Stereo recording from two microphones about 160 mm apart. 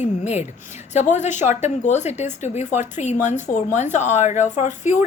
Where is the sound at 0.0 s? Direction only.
45° left (ahead or behind).